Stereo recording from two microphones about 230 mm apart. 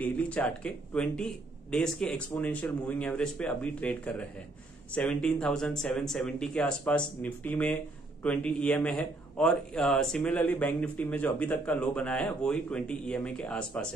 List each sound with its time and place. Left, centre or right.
0.0 s speech: centre